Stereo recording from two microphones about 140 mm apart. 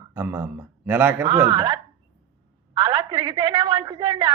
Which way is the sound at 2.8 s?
35° right (ahead or behind).